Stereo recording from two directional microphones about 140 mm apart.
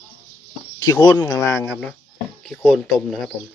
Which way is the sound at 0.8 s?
15° left (ahead or behind).